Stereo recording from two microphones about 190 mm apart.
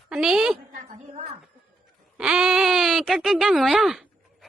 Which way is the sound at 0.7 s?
40° right (ahead or behind).